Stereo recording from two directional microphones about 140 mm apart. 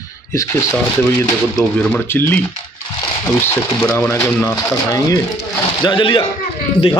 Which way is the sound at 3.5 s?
15° left (ahead or behind).